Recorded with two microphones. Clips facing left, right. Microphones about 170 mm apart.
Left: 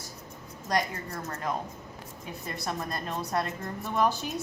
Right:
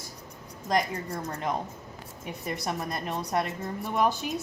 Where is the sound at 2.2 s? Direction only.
20° right (ahead or behind).